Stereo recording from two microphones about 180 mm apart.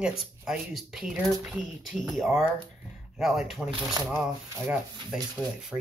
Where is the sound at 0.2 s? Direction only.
5° right (ahead or behind).